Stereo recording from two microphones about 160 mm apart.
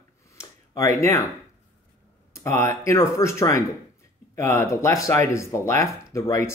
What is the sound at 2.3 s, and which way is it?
Speech, 20° left (ahead or behind).